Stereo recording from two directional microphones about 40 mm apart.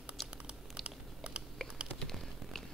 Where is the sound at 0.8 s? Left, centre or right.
Right.